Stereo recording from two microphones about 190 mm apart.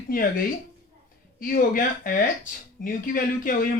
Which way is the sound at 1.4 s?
50° left (ahead or behind).